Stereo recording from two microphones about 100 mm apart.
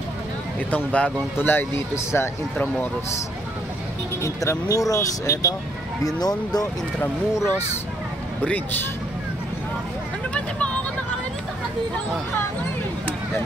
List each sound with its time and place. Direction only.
0.7 s speech: 15° left (ahead or behind)
4.2 s speech: 30° left (ahead or behind)
7.3 s speech: 25° left (ahead or behind)
10.3 s vehicle: 15° left (ahead or behind)